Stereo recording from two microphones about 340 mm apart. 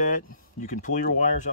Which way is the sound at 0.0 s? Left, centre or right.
Left.